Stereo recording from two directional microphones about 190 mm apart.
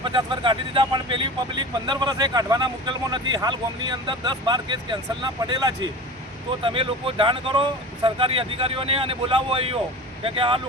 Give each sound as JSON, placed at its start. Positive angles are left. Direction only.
{"t": 0.0, "sound": "speech", "side_deg": -25}